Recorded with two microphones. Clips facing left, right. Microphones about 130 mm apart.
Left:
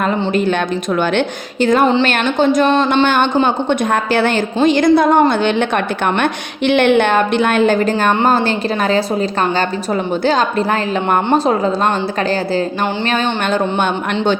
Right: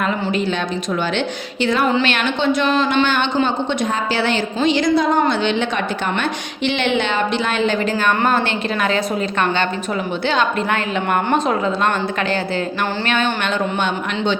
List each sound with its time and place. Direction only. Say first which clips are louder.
0.0 s a woman's voice: left 4 dB; 45° left (ahead or behind)
1.6 s a woman's voice: left 5 dB; 45° left (ahead or behind)
13.1 s a woman's voice: left 2 dB; 40° left (ahead or behind)